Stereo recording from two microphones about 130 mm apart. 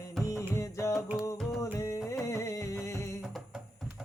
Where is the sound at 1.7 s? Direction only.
25° left (ahead or behind).